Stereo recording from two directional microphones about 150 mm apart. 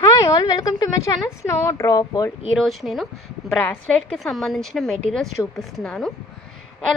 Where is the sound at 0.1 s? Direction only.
25° left (ahead or behind).